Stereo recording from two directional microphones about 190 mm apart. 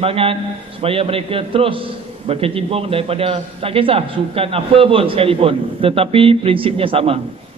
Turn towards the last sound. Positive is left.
turn(degrees=-30)  # may be behind; listen again after turning